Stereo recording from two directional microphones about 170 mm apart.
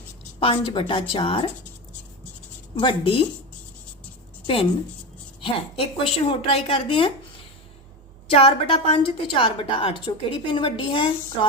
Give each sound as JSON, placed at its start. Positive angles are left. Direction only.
{"t": 0.3, "sound": "a woman's voice", "side_deg": 30}
{"t": 2.7, "sound": "a woman's voice", "side_deg": 30}
{"t": 5.4, "sound": "a woman's voice", "side_deg": 35}
{"t": 8.3, "sound": "a woman's voice", "side_deg": 35}